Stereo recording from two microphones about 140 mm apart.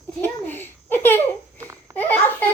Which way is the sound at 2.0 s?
15° left (ahead or behind).